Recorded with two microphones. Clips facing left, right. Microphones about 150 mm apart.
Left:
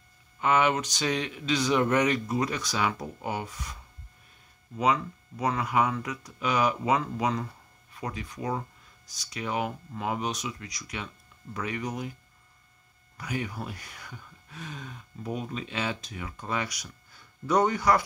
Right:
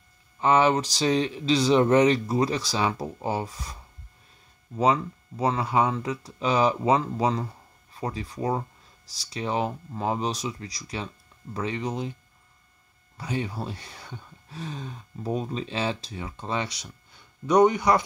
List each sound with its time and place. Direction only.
0.4 s speech: 30° right (ahead or behind)
4.7 s speech: 30° right (ahead or behind)
13.2 s speech: 30° right (ahead or behind)